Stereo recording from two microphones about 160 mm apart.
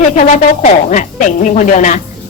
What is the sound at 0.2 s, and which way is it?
A woman's voice, 50° left (ahead or behind).